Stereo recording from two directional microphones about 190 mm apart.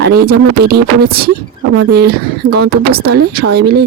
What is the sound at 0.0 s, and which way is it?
Speech, 55° right (ahead or behind).